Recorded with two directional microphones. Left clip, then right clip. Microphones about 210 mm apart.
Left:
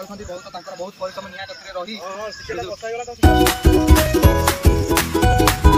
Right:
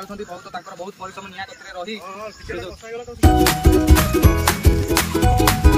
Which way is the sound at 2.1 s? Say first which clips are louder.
Left 3 dB; 30° left (ahead or behind).